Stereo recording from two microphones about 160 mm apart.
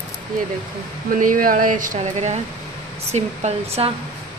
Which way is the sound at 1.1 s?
55° right (ahead or behind).